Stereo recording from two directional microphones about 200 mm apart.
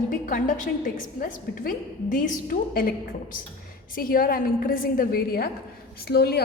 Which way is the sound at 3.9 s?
45° left (ahead or behind).